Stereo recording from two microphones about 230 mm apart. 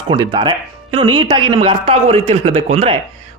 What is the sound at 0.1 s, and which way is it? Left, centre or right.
A man's voice, centre.